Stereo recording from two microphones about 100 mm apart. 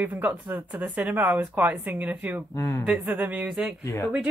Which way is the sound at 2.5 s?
30° left (ahead or behind).